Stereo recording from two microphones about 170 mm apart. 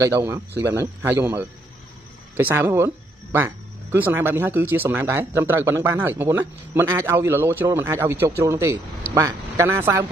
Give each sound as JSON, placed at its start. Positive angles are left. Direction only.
{"t": 0.0, "sound": "speech", "side_deg": -15}